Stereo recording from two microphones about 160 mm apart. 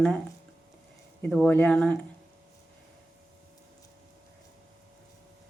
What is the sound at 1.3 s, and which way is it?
Speech, 5° left (ahead or behind).